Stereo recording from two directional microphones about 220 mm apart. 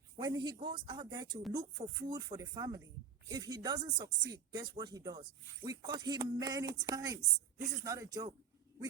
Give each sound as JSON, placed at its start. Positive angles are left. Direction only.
{"t": 0.2, "sound": "speech", "side_deg": -20}